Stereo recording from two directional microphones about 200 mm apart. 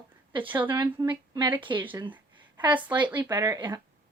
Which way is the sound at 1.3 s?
25° right (ahead or behind).